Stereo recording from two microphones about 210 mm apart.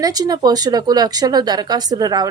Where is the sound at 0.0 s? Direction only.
20° right (ahead or behind).